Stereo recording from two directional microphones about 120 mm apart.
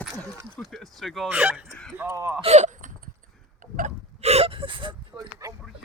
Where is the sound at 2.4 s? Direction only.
70° right (ahead or behind).